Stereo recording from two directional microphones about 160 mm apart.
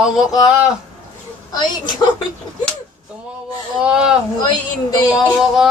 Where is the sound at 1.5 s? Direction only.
25° left (ahead or behind).